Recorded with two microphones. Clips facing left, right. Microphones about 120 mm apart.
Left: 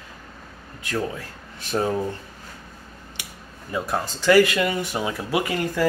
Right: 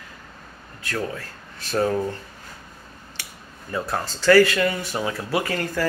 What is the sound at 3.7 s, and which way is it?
Speech, 15° left (ahead or behind).